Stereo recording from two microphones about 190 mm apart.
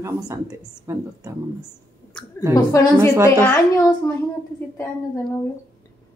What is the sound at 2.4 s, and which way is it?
Speech, 10° left (ahead or behind).